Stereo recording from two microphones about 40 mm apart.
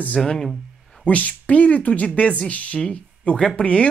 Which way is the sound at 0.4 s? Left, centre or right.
Centre.